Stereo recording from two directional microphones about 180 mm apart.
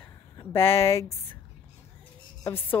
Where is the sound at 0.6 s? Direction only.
35° left (ahead or behind).